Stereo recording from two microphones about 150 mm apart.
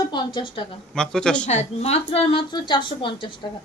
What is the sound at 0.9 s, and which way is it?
Speech, 5° left (ahead or behind).